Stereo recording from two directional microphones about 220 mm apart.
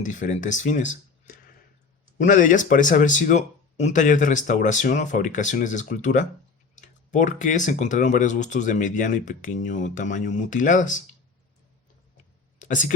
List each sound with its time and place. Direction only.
0.0 s speech: 35° left (ahead or behind)
2.1 s speech: 35° left (ahead or behind)
12.5 s a sound: 35° left (ahead or behind)